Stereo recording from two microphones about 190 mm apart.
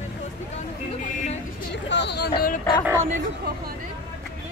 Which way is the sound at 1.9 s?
65° left (ahead or behind).